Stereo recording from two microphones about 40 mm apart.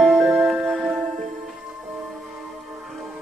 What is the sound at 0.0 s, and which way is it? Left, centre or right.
Music, centre.